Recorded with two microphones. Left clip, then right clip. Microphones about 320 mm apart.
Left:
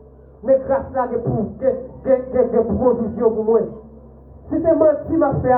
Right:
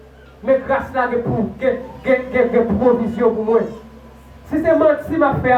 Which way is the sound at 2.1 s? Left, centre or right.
Right.